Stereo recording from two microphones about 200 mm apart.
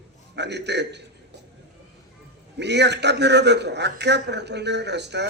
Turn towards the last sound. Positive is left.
turn(degrees=-60)  # may be behind; listen again after turning